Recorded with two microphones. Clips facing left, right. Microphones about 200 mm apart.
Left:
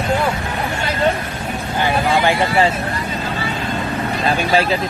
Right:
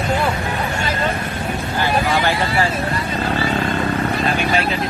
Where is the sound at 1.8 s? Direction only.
20° left (ahead or behind).